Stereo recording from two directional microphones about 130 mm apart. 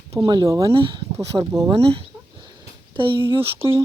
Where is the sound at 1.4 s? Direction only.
30° right (ahead or behind).